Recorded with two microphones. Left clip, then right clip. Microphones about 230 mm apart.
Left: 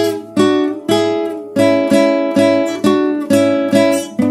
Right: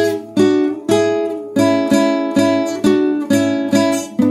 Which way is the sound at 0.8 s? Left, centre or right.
Left.